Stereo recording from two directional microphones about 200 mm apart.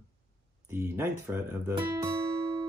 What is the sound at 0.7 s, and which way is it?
Speech, 10° right (ahead or behind).